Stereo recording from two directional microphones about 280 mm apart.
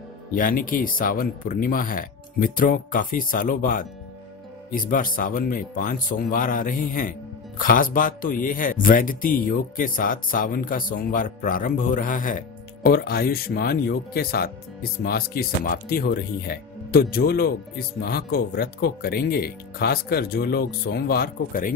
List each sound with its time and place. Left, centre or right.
0.3 s speech: left